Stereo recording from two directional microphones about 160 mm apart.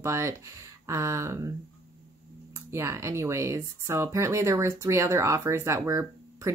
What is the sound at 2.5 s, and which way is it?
Speech, 15° right (ahead or behind).